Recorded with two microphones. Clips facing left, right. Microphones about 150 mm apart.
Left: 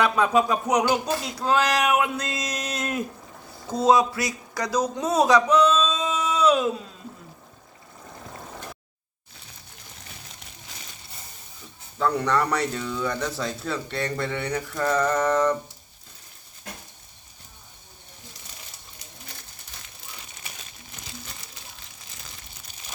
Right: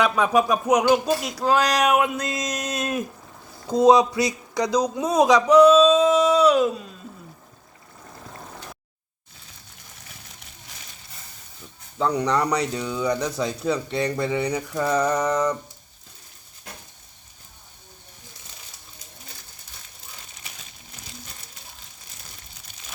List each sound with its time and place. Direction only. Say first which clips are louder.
0.0 s a man's voice: right 1 dB; 15° right (ahead or behind)
11.9 s a man's voice: right 1 dB; 15° right (ahead or behind)